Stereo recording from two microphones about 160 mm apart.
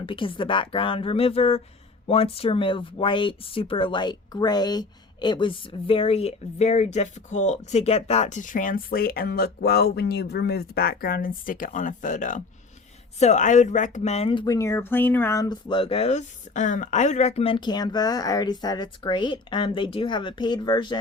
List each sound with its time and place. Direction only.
0.0 s speech: 35° left (ahead or behind)
15.7 s speech: 35° left (ahead or behind)